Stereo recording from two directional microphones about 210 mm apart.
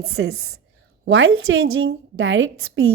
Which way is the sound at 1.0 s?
75° right (ahead or behind).